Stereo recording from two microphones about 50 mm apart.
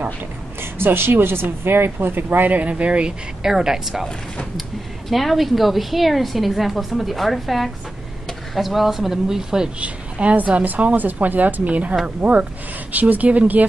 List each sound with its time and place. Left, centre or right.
0.6 s speech: right
2.6 s a woman's voice: right
3.4 s speech: centre
5.1 s a woman's voice: centre
9.8 s a woman's voice: right